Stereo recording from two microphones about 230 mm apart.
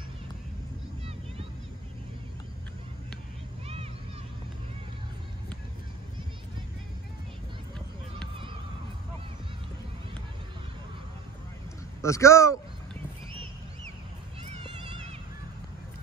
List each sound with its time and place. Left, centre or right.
12.0 s speech: centre